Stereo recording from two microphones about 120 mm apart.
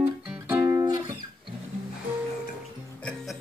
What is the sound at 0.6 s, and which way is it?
Music, 25° right (ahead or behind).